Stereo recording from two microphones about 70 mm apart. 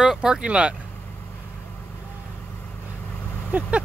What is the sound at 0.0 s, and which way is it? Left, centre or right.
Speech, centre.